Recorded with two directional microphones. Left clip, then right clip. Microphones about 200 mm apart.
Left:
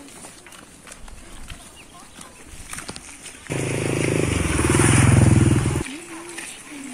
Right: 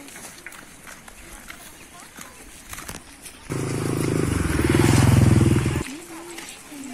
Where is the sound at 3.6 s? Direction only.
50° right (ahead or behind).